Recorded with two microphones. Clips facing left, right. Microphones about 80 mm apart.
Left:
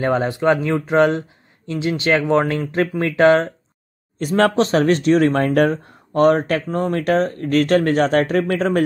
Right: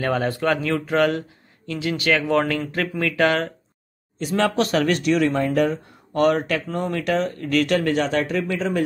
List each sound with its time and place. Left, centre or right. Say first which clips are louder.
0.0 s speech: left 4 dB; left
4.2 s speech: left 5 dB; left
4.6 s speech: left 4 dB; left
5.3 s speech: left 4 dB; left
6.1 s speech: left 4 dB; left